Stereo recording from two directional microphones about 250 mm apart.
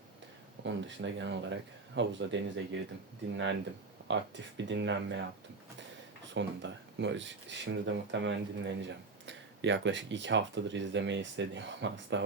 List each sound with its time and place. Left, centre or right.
0.6 s speech: right
6.2 s speech: right